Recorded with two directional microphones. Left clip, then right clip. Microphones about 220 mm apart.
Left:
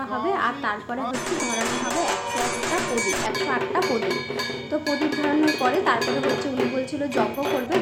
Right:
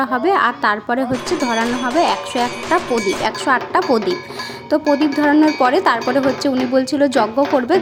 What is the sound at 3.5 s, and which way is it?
Speech, 50° right (ahead or behind).